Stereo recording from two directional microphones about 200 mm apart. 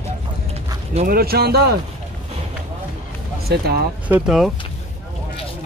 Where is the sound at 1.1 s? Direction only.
50° right (ahead or behind).